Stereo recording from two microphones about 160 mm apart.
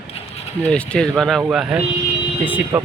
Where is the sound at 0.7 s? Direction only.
5° left (ahead or behind); by 2.8 s 10° right (ahead or behind).